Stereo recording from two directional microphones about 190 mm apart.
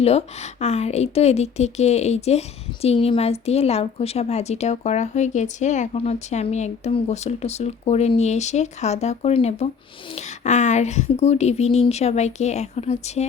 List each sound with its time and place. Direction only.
0.0 s a woman's voice: 35° left (ahead or behind)